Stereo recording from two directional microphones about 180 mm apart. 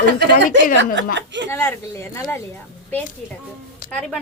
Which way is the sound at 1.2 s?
80° right.